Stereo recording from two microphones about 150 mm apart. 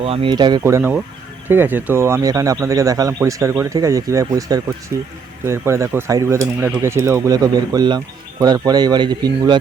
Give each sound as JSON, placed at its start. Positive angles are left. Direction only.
{"t": 0.0, "sound": "speech", "side_deg": -40}
{"t": 0.6, "sound": "speech", "side_deg": -15}